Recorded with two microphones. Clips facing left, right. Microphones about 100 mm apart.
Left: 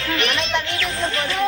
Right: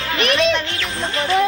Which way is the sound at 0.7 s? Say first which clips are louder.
Even; 30° right (ahead or behind).